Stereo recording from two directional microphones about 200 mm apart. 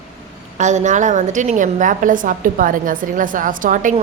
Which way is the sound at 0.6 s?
35° right (ahead or behind).